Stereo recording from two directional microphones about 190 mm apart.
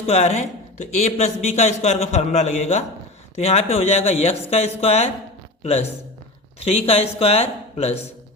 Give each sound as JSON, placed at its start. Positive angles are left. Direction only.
{"t": 0.0, "sound": "a man's voice", "side_deg": 35}
{"t": 6.7, "sound": "a man's voice", "side_deg": 35}